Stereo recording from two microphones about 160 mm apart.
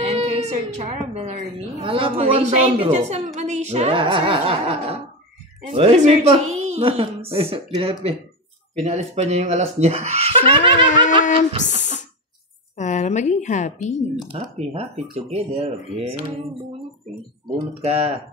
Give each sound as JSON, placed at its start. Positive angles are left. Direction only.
{"t": 0.1, "sound": "speech", "side_deg": -40}
{"t": 1.8, "sound": "speech", "side_deg": -35}
{"t": 11.1, "sound": "a sound", "side_deg": 55}
{"t": 12.7, "sound": "a woman's voice", "side_deg": 50}
{"t": 14.2, "sound": "speech", "side_deg": -40}
{"t": 17.8, "sound": "speech", "side_deg": -40}